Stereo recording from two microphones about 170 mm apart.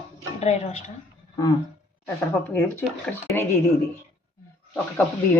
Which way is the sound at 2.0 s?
15° left (ahead or behind).